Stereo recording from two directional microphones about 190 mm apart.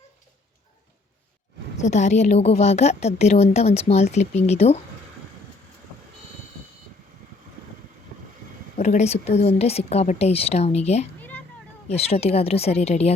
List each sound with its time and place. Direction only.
1.7 s a woman's voice: 35° left (ahead or behind)
8.8 s a woman's voice: 40° left (ahead or behind)
11.2 s children playing: 10° left (ahead or behind)
11.9 s a woman's voice: 30° left (ahead or behind)